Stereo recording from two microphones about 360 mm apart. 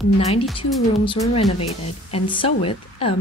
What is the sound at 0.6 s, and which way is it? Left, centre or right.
Speech, centre.